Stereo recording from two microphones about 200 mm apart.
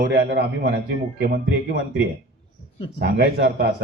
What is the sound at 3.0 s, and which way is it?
Speech, 55° right (ahead or behind).